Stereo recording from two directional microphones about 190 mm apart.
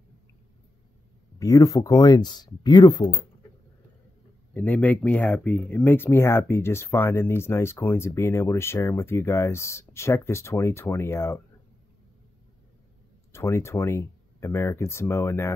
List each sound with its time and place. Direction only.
1.4 s speech: 15° left (ahead or behind)
4.6 s speech: 10° left (ahead or behind)
13.3 s speech: 15° left (ahead or behind)